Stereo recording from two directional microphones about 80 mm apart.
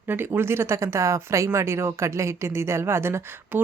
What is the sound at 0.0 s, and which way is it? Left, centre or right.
Speech, right.